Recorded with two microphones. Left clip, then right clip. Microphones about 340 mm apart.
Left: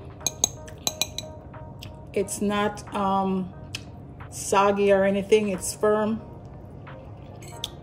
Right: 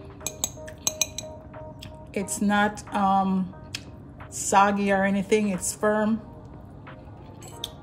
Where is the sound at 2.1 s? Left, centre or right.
Centre.